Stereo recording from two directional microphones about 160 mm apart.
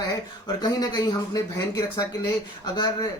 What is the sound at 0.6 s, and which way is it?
Speech, 25° left (ahead or behind).